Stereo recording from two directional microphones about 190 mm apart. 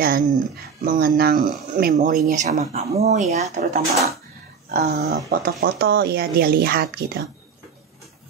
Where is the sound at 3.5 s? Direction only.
40° right (ahead or behind).